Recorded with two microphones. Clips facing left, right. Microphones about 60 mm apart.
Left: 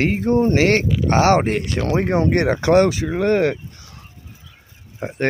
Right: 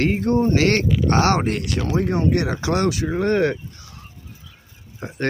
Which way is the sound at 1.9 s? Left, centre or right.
Left.